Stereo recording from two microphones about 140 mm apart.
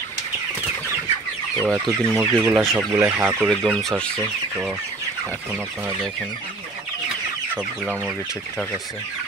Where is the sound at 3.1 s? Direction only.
15° right (ahead or behind).